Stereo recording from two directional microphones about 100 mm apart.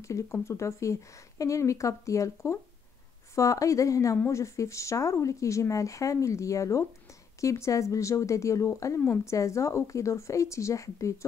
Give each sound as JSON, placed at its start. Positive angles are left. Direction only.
{"t": 0.0, "sound": "speech", "side_deg": 30}